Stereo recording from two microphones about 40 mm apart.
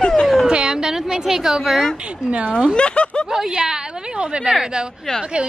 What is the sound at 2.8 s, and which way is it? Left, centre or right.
Speech, left.